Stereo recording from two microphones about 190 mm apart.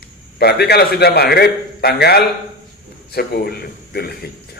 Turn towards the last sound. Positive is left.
turn(degrees=55)  # may be behind; listen again after turning